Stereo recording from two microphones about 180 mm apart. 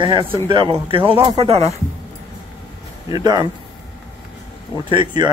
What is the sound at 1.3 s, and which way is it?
Speech, 30° right (ahead or behind).